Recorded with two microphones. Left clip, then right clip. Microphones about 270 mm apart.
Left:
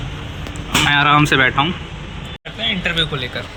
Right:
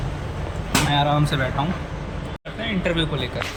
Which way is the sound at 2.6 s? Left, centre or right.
Centre.